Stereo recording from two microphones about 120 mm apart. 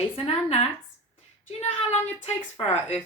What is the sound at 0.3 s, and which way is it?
A woman's voice, 55° left (ahead or behind).